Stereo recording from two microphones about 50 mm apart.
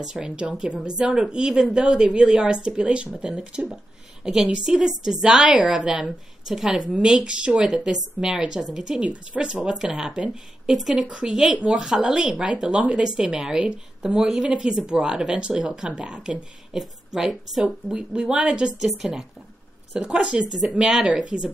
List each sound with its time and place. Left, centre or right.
0.0 s speech: centre
5.5 s speech: right
14.5 s a woman's voice: centre
20.0 s speech: centre